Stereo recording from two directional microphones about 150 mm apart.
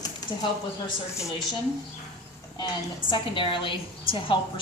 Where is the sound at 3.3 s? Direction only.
35° left (ahead or behind).